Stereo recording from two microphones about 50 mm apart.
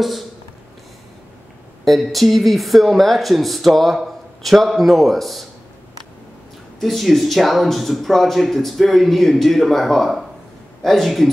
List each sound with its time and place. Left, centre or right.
1.9 s speech: centre
6.8 s speech: centre